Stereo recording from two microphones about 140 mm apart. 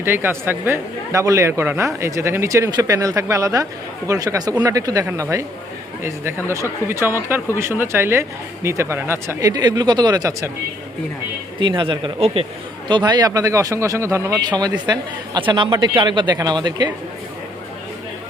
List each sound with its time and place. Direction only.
0.0 s speech: 15° right (ahead or behind)
11.6 s a man's voice: 35° right (ahead or behind)
12.9 s a man's voice: 30° right (ahead or behind)